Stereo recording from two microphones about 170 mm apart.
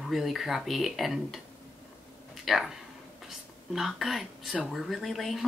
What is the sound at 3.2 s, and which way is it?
Speech, centre (ahead or behind).